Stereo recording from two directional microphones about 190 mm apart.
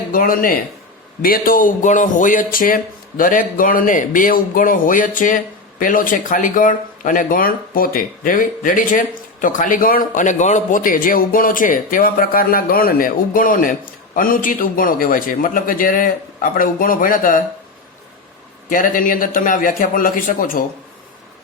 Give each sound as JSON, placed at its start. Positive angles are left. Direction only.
{"t": 0.1, "sound": "speech", "side_deg": 50}
{"t": 18.7, "sound": "speech", "side_deg": 45}